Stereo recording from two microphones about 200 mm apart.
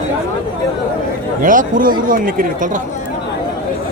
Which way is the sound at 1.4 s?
45° right (ahead or behind).